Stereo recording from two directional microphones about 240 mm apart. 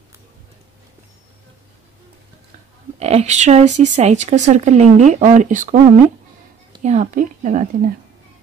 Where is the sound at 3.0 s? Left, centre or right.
Right.